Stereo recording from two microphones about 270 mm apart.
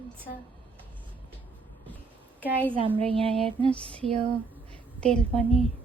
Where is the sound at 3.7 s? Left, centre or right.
Centre.